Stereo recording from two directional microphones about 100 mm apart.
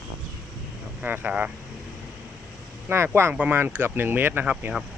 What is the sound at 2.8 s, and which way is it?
Speech, 25° right (ahead or behind).